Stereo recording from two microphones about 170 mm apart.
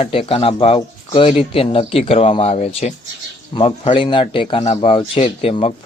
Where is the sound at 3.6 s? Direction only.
30° left (ahead or behind).